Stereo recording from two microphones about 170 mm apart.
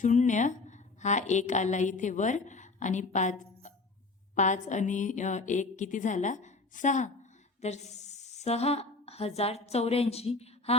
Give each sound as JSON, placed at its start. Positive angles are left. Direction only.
{"t": 0.0, "sound": "a sound", "side_deg": 45}
{"t": 1.3, "sound": "a woman's voice", "side_deg": 45}
{"t": 4.4, "sound": "a woman's voice", "side_deg": 45}